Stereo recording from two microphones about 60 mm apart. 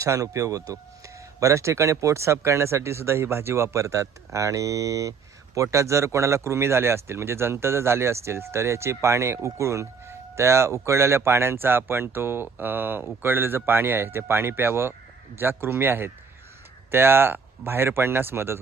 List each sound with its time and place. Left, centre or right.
0.0 s speech: right
5.5 s a man's voice: right